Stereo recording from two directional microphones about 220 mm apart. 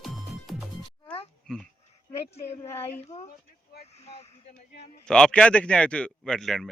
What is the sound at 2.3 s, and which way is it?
Speech, 25° left (ahead or behind).